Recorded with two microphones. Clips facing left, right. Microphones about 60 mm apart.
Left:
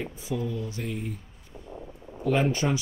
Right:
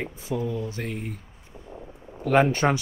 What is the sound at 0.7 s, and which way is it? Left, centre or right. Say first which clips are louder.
Speech: right 1 dB; right.